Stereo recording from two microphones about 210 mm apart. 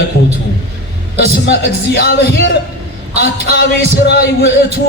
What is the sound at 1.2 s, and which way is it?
Speech, 50° left (ahead or behind).